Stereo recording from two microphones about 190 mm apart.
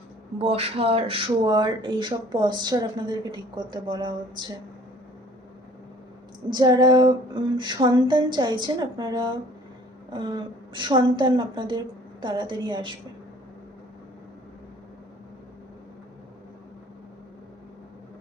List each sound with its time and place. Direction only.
0.3 s speech: 30° right (ahead or behind)
6.5 s speech: 20° right (ahead or behind)